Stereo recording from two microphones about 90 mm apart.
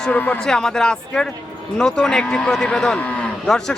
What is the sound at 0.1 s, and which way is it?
Speech, 20° left (ahead or behind).